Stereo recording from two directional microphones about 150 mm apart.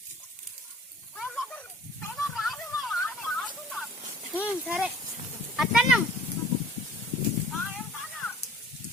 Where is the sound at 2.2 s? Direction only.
Centre (ahead or behind).